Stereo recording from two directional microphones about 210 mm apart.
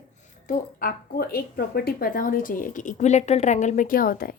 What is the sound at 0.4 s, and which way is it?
A woman's voice, 40° left (ahead or behind).